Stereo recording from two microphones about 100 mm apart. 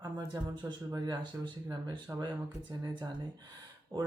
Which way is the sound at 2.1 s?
20° right (ahead or behind).